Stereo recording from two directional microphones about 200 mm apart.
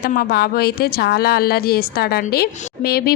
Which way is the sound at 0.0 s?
50° left (ahead or behind).